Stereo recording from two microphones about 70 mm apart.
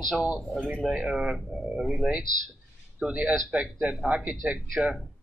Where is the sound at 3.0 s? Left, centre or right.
Centre.